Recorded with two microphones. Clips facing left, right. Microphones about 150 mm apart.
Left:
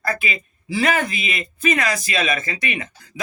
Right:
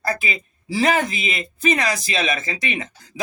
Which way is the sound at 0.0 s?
30° right (ahead or behind).